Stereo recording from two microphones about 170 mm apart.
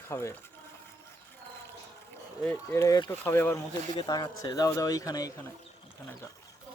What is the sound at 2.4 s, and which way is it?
Speech, 15° left (ahead or behind).